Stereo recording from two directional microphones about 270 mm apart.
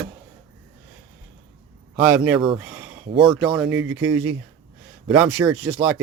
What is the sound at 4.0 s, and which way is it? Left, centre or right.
Speech, centre.